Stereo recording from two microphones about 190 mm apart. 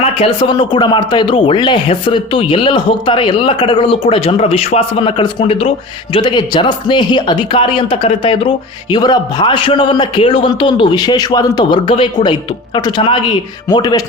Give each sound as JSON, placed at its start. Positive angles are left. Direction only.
{"t": 0.0, "sound": "speech", "side_deg": 30}